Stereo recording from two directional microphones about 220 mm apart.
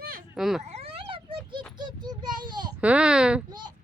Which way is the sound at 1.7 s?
20° right (ahead or behind).